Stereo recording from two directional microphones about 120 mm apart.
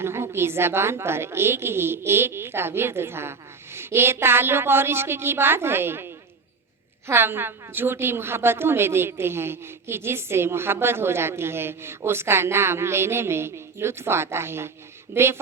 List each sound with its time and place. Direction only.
0.0 s a woman's voice: 20° right (ahead or behind)